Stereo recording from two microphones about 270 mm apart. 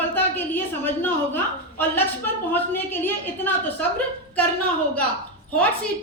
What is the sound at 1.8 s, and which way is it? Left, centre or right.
A woman's voice, centre.